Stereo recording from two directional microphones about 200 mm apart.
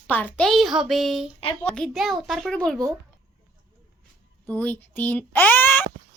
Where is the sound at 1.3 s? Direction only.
25° left (ahead or behind).